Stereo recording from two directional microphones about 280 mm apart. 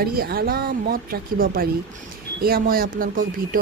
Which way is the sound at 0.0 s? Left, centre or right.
Right.